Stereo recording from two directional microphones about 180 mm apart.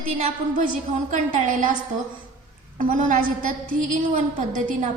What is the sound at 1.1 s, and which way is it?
Speech, 45° right (ahead or behind).